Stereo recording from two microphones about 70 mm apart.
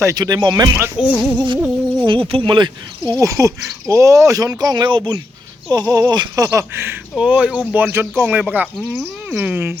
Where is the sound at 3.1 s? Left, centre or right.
Right.